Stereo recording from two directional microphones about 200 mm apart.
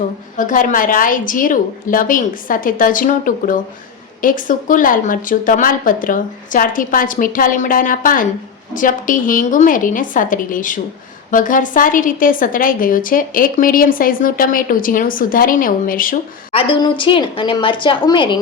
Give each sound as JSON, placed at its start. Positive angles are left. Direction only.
{"t": 0.3, "sound": "a woman's voice", "side_deg": 40}
{"t": 16.5, "sound": "a woman's voice", "side_deg": 25}